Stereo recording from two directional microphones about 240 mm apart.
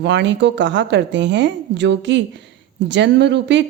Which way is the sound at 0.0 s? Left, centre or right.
Right.